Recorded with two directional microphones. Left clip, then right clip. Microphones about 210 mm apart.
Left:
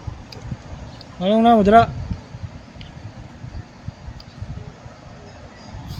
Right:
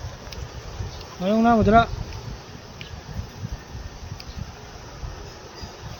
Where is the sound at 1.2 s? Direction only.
50° left (ahead or behind).